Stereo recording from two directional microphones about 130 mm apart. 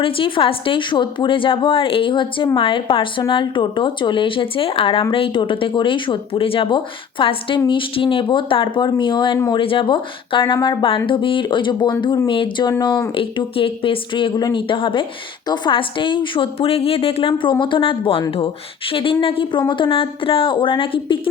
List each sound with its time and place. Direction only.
0.0 s speech: 40° left (ahead or behind)